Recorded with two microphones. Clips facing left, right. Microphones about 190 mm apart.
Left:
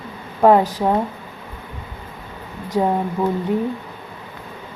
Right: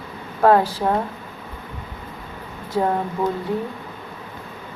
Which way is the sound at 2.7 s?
10° left (ahead or behind).